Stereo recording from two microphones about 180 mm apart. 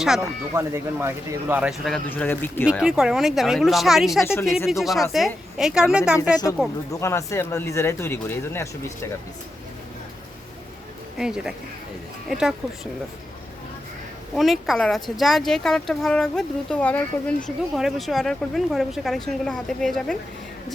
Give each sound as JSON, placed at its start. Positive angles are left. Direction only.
{"t": 0.5, "sound": "speech", "side_deg": -15}
{"t": 2.0, "sound": "speech", "side_deg": 10}
{"t": 2.8, "sound": "speech", "side_deg": -5}
{"t": 6.9, "sound": "speech", "side_deg": 15}
{"t": 11.2, "sound": "speech", "side_deg": -5}
{"t": 14.3, "sound": "speech", "side_deg": 0}